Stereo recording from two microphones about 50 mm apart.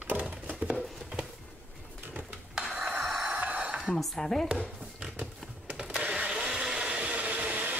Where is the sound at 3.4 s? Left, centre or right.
Right.